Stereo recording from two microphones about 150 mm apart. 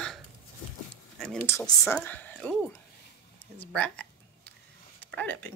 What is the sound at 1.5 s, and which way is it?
Speech, 15° left (ahead or behind).